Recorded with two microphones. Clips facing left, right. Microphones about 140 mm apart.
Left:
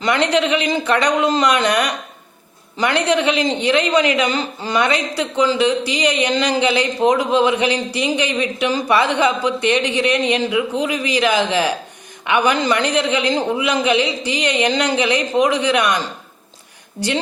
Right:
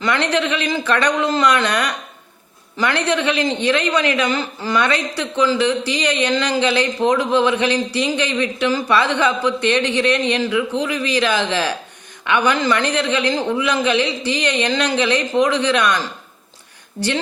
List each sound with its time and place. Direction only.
0.0 s a woman's voice: 15° left (ahead or behind)